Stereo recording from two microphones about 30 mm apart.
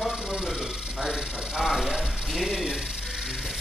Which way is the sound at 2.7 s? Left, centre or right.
Centre.